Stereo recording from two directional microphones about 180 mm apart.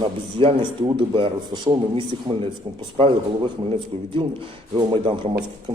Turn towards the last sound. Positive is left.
turn(degrees=-30)  # may be behind; listen again after turning